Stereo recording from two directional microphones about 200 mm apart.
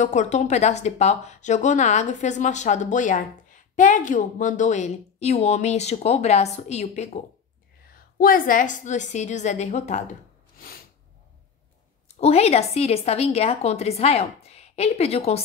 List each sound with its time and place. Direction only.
0.0 s speech: 35° left (ahead or behind)
8.2 s speech: 45° left (ahead or behind)
12.1 s speech: 30° left (ahead or behind)